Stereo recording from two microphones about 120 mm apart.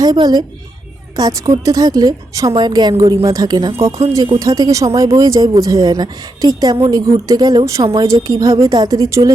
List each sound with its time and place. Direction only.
0.0 s a woman's voice: 30° right (ahead or behind)